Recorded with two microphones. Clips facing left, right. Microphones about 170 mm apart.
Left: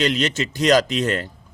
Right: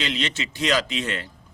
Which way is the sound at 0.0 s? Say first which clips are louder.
Left 7 dB; 45° left (ahead or behind).